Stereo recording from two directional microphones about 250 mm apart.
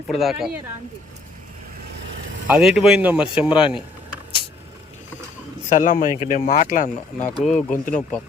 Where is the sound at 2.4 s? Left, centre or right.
Centre.